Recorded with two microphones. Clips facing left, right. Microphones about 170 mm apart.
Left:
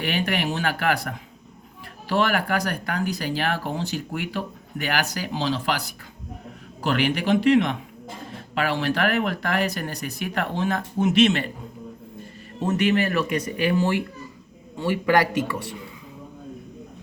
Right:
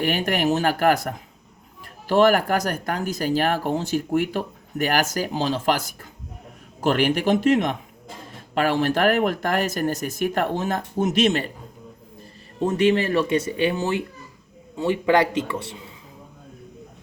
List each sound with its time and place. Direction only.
0.0 s speech: 45° right (ahead or behind)
12.5 s speech: 30° right (ahead or behind)